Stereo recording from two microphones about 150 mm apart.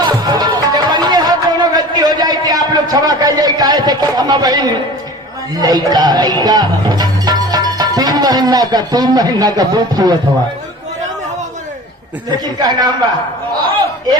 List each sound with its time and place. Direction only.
0.0 s music: 25° right (ahead or behind)
12.3 s a man's voice: 25° right (ahead or behind)